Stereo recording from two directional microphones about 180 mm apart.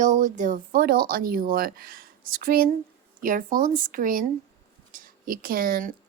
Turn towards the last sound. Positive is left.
turn(degrees=-50)  # may be behind; listen again after turning